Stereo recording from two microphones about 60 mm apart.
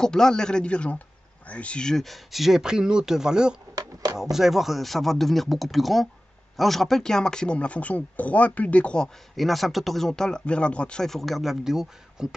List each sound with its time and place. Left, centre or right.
0.0 s speech: centre
3.7 s a sound: right
4.2 s speech: centre
9.4 s speech: centre
11.1 s speech: centre